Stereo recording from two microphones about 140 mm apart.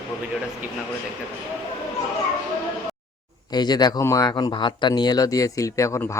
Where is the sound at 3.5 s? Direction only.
30° left (ahead or behind).